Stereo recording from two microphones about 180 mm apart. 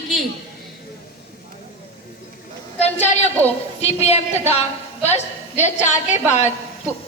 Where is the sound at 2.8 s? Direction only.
40° left (ahead or behind).